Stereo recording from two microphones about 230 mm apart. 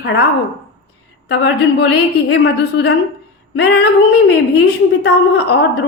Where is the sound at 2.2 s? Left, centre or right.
Left.